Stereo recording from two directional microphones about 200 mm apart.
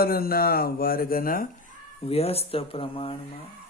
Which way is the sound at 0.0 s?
50° left (ahead or behind).